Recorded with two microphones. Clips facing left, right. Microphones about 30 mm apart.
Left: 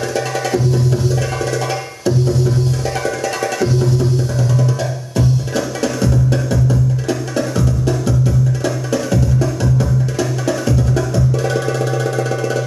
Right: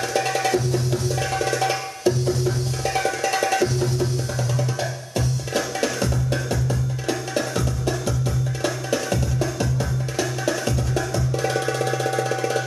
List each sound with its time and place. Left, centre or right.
0.7 s music: centre
1.7 s music: centre
7.1 s music: centre